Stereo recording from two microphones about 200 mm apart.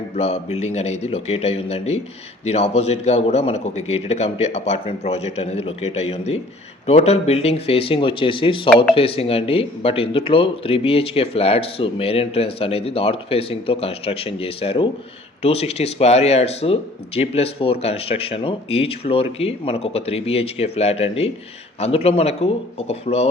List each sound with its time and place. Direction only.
0.2 s a man's voice: 30° left (ahead or behind)